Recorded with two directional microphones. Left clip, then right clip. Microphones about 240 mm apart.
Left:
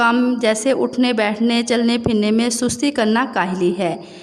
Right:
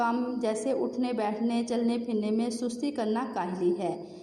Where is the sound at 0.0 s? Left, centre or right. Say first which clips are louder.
Left 13 dB; left.